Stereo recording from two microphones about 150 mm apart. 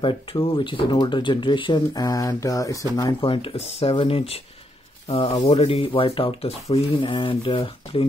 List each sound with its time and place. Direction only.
0.0 s speech: 35° left (ahead or behind)